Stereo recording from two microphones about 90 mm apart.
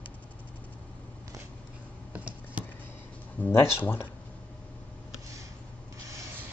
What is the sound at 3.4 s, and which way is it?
Speech, 25° left (ahead or behind).